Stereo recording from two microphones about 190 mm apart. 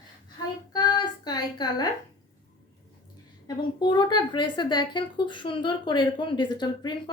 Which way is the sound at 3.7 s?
25° left (ahead or behind).